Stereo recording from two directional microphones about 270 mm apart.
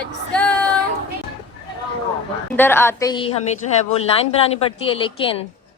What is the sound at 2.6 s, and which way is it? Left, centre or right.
Speech, centre.